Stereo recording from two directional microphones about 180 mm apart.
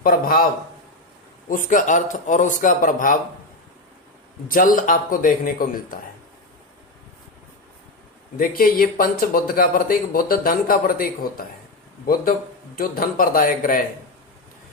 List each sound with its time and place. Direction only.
0.0 s speech: 55° left (ahead or behind)
1.5 s speech: 50° left (ahead or behind)
4.4 s speech: 50° left (ahead or behind)
8.4 s speech: 50° left (ahead or behind)
12.7 s speech: 50° left (ahead or behind)